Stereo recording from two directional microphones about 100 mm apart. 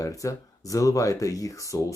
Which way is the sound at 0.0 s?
35° left (ahead or behind).